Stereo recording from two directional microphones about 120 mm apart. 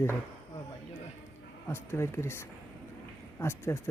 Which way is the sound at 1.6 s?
20° left (ahead or behind).